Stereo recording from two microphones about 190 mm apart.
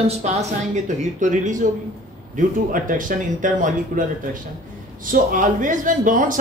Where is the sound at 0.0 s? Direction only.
35° right (ahead or behind).